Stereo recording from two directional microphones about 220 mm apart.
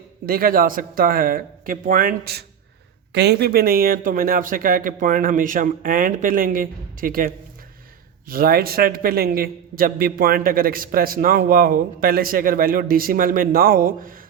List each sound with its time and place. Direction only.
0.3 s a man's voice: 40° right (ahead or behind)